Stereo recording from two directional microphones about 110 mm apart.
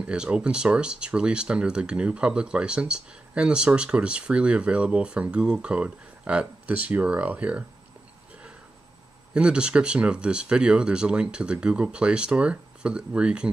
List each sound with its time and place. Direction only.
0.0 s speech: 10° right (ahead or behind)
9.3 s speech: 10° right (ahead or behind)